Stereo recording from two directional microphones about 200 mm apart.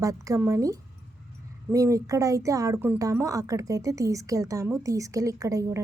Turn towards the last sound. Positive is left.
turn(degrees=-15)  # may be behind; listen again after turning